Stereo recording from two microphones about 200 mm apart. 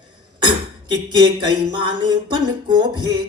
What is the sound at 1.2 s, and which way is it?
Speech, 25° right (ahead or behind).